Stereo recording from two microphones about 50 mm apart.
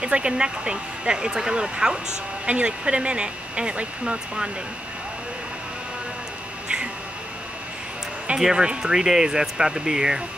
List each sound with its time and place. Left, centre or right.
0.0 s speech: centre
8.4 s speech: centre